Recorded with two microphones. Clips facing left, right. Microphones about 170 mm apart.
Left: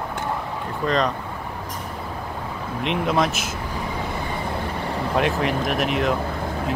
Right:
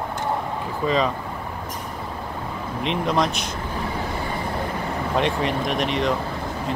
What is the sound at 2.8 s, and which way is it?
Speech, centre (ahead or behind).